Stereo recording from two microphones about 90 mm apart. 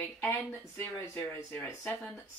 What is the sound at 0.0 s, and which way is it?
Speech, 20° left (ahead or behind).